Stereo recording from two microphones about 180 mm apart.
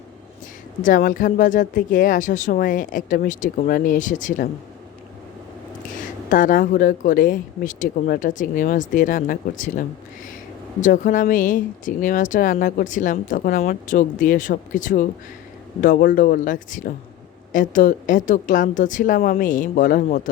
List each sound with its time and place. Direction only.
0.8 s speech: 50° left (ahead or behind)
5.9 s speech: 45° left (ahead or behind)